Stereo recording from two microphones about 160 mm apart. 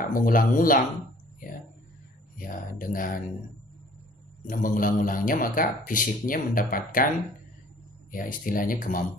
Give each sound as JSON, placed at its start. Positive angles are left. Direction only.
{"t": 0.1, "sound": "speech", "side_deg": 60}
{"t": 2.3, "sound": "speech", "side_deg": 60}
{"t": 4.5, "sound": "speech", "side_deg": 60}
{"t": 8.1, "sound": "speech", "side_deg": 60}